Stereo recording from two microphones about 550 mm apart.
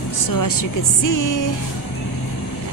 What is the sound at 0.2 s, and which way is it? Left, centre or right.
Speech, left.